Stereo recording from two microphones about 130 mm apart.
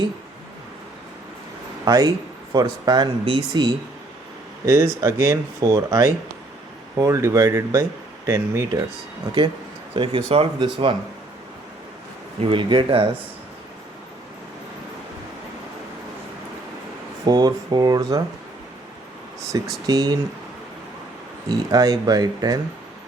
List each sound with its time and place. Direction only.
1.8 s speech: 30° right (ahead or behind)
4.6 s speech: 20° right (ahead or behind)
9.9 s speech: 45° right (ahead or behind)
12.4 s speech: 40° right (ahead or behind)
17.2 s speech: 30° right (ahead or behind)
19.5 s speech: 30° right (ahead or behind)
21.5 s speech: 30° right (ahead or behind)